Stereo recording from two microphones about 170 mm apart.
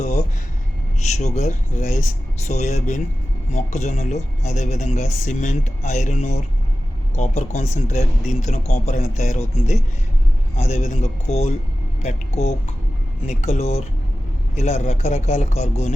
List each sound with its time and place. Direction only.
1.0 s a man's voice: 40° left (ahead or behind)